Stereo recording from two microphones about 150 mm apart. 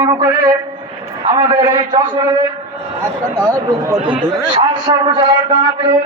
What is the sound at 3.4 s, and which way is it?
Speech, 20° right (ahead or behind).